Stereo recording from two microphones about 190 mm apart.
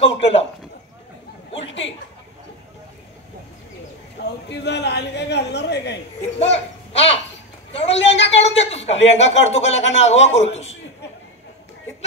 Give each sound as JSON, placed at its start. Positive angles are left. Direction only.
{"t": 0.0, "sound": "a man's voice", "side_deg": 30}
{"t": 1.5, "sound": "a sound", "side_deg": 75}
{"t": 4.5, "sound": "a man's voice", "side_deg": 60}
{"t": 6.4, "sound": "a man's voice", "side_deg": 35}